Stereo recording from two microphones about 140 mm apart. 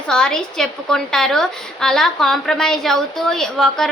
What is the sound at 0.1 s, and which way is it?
A woman's voice, 5° left (ahead or behind).